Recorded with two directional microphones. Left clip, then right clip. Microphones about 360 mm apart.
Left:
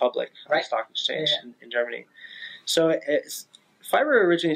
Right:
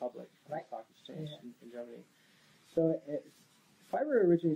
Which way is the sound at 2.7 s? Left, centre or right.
Centre.